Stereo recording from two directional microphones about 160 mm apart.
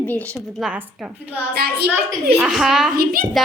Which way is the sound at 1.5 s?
75° right (ahead or behind).